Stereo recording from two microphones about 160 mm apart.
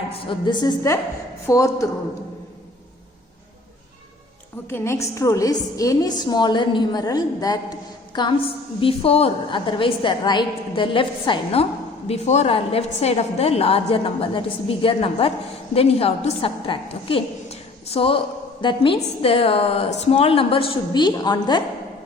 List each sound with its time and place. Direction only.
0.1 s a woman's voice: 30° left (ahead or behind)
4.7 s a woman's voice: 15° left (ahead or behind); by 11.6 s 30° left (ahead or behind)
12.0 s a woman's voice: 40° left (ahead or behind); by 21.6 s 25° left (ahead or behind)